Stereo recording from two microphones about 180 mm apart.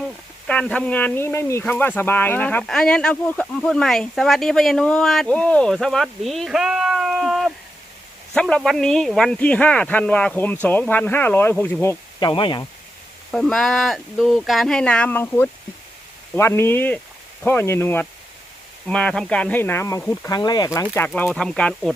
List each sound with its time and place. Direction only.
0.4 s speech: 5° left (ahead or behind)
12.3 s speech: 25° left (ahead or behind)
13.3 s speech: centre (ahead or behind); by 20.8 s 20° left (ahead or behind)
20.9 s speech: 10° left (ahead or behind)